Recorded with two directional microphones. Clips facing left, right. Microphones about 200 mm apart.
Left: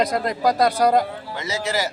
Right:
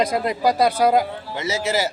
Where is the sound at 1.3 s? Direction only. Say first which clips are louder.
Right 3 dB; 20° right (ahead or behind).